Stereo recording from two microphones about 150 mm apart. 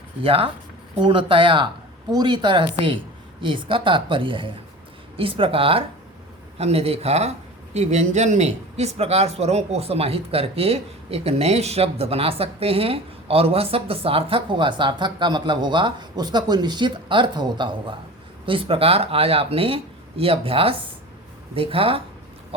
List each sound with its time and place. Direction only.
0.2 s speech: 35° right (ahead or behind)